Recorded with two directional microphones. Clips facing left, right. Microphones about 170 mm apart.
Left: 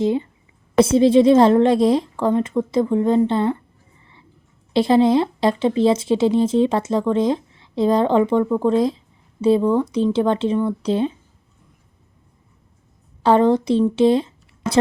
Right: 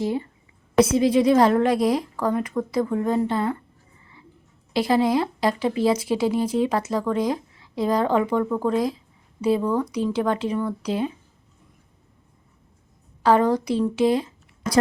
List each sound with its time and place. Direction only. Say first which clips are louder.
0.0 s a woman's voice: left 5 dB; 20° left (ahead or behind)
4.7 s speech: left 5 dB; 25° left (ahead or behind)
13.2 s a woman's voice: left 4 dB; 25° left (ahead or behind)